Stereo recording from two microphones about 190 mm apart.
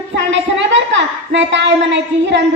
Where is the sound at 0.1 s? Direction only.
70° right (ahead or behind).